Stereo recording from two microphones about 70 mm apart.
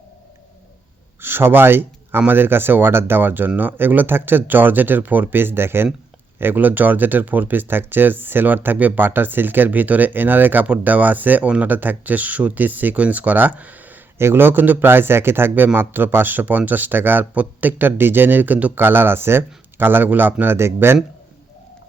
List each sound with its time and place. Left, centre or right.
1.2 s speech: right
14.2 s speech: right